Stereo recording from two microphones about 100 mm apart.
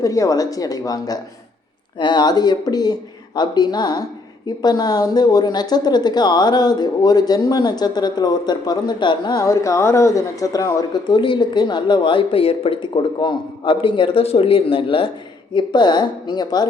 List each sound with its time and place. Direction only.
0.0 s speech: 35° left (ahead or behind); by 9.4 s 50° left (ahead or behind)
9.4 s speech: 35° left (ahead or behind)
11.1 s speech: 55° left (ahead or behind)
15.5 s speech: 50° left (ahead or behind)